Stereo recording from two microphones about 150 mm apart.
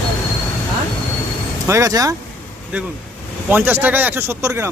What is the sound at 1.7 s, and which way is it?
Speech, 20° right (ahead or behind).